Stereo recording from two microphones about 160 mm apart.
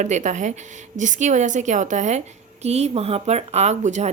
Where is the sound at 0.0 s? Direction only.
50° right (ahead or behind).